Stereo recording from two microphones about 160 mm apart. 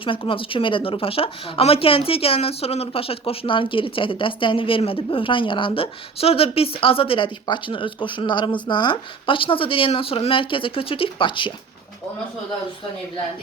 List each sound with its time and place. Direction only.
0.0 s a woman's voice: 35° left (ahead or behind)